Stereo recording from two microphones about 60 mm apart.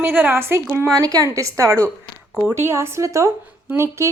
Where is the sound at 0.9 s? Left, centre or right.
Right.